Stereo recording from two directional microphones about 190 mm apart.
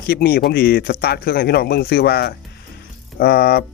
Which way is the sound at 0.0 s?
55° left (ahead or behind).